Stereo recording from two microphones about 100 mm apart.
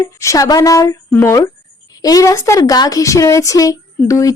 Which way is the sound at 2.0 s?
35° left (ahead or behind).